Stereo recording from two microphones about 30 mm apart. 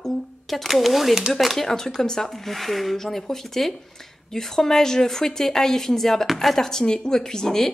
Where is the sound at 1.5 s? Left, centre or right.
Centre.